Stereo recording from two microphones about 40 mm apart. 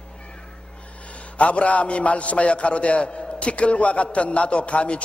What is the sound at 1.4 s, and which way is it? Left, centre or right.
A man's voice, left.